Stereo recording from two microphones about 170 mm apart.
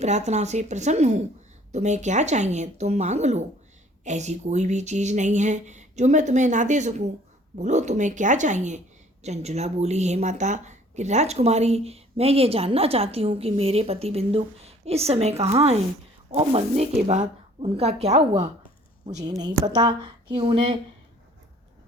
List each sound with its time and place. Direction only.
0.0 s speech: 40° right (ahead or behind)
19.4 s speech: 25° right (ahead or behind)